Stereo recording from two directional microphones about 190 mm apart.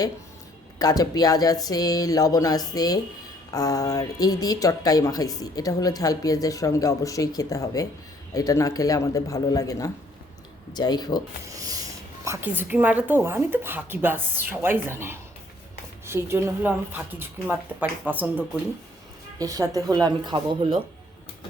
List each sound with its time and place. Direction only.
0.8 s speech: 20° left (ahead or behind)
11.4 s speech: 20° right (ahead or behind)
19.4 s speech: 20° right (ahead or behind)